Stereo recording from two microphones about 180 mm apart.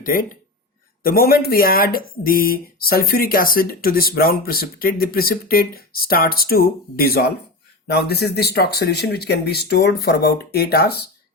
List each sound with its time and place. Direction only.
0.0 s speech: 50° left (ahead or behind)